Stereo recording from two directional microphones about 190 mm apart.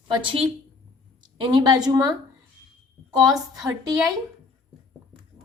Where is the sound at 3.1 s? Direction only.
20° right (ahead or behind).